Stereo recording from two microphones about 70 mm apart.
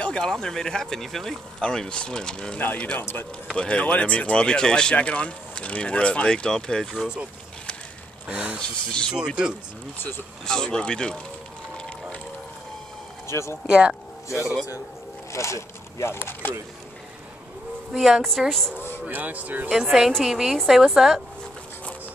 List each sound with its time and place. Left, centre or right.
0.0 s speech: centre; by 3.3 s left
3.5 s speech: centre
7.0 s a woman's voice: centre
8.3 s a woman's voice: centre
8.5 s speech: centre
9.9 s speech: left
10.4 s speech: centre
13.3 s speech: left
13.7 s a woman's voice: centre
15.3 s speech: left
16.2 s speech: left
17.9 s a woman's voice: centre
19.0 s speech: right
19.7 s a woman's voice: centre